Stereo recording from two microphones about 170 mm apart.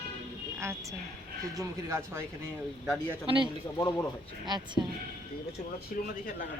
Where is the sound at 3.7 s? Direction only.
20° left (ahead or behind).